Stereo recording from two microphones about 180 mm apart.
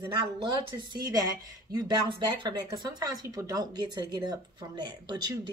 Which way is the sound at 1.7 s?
25° right (ahead or behind).